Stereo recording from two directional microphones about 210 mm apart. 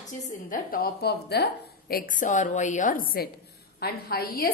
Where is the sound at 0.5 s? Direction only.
45° left (ahead or behind).